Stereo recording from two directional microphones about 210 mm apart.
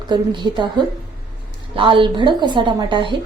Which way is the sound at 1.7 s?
25° right (ahead or behind).